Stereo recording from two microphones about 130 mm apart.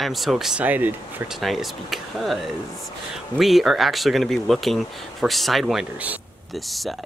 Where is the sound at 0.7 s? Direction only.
15° right (ahead or behind).